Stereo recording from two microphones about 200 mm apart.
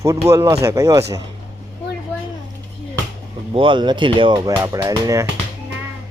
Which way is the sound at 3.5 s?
25° right (ahead or behind).